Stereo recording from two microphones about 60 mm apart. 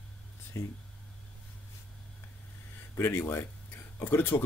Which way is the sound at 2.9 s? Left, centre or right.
Left.